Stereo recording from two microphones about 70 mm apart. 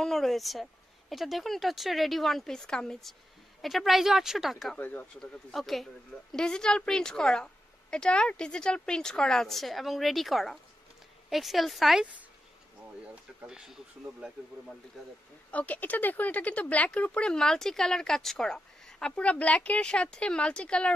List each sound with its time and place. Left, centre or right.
0.0 s speech: centre
4.7 s speech: left
5.2 s speech: centre
13.0 s speech: centre
13.5 s speech: centre
15.0 s speech: centre
15.5 s speech: left